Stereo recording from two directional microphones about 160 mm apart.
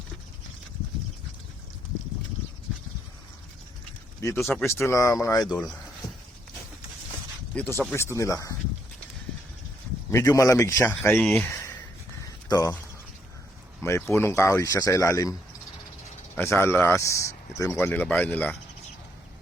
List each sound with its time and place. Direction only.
4.2 s speech: 20° left (ahead or behind)
5.5 s speech: 5° left (ahead or behind)
7.8 s speech: 15° left (ahead or behind)
10.1 s speech: 20° left (ahead or behind)
13.8 s speech: 15° left (ahead or behind)
16.4 s speech: 15° left (ahead or behind)